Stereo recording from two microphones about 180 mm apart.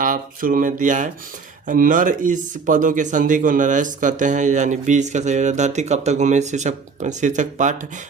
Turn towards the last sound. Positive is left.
turn(degrees=-45)  # may be behind; listen again after turning